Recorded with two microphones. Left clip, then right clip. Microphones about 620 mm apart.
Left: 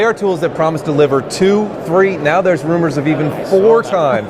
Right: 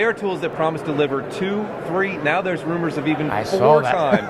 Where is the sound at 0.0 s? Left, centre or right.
Left.